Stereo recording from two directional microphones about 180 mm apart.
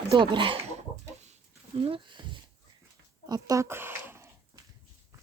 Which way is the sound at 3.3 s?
20° right (ahead or behind).